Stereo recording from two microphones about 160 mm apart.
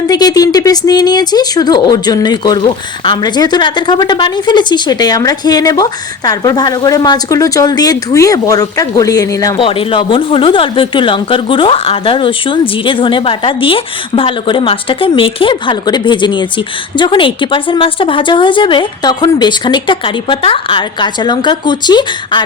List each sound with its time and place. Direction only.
0.1 s speech: 25° left (ahead or behind)
9.6 s speech: 35° left (ahead or behind)